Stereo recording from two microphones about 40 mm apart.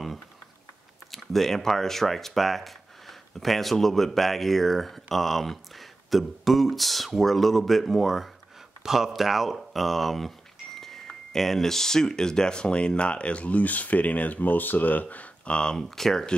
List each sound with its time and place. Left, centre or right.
1.1 s speech: centre
8.8 s speech: centre; by 15.2 s left
15.4 s speech: left
15.8 s speech: centre